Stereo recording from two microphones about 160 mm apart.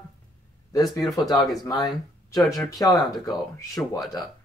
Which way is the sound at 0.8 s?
Centre (ahead or behind).